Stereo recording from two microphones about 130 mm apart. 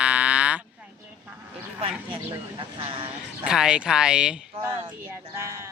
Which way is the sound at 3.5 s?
5° right (ahead or behind).